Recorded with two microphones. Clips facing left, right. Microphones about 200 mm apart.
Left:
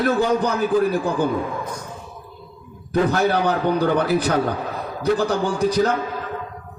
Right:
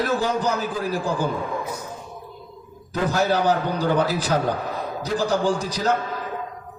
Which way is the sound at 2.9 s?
60° left (ahead or behind).